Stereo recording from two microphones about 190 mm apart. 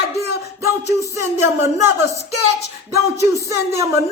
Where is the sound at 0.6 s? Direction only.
15° right (ahead or behind).